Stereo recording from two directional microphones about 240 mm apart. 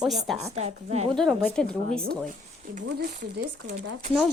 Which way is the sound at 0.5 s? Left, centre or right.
Right.